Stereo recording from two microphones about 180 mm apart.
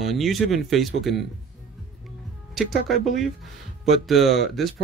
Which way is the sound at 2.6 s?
Centre (ahead or behind).